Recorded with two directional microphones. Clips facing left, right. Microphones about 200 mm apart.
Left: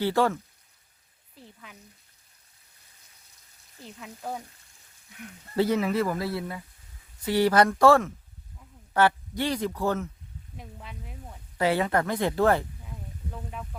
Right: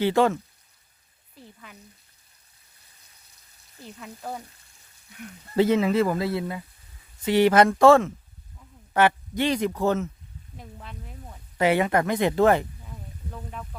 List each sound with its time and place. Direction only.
0.0 s speech: 20° right (ahead or behind)
4.0 s speech: 5° left (ahead or behind)
5.5 s speech: 25° right (ahead or behind)
10.6 s a sound: 5° left (ahead or behind)
11.5 s speech: 20° right (ahead or behind)